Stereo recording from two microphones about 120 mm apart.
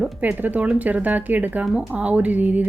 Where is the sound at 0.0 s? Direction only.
15° right (ahead or behind).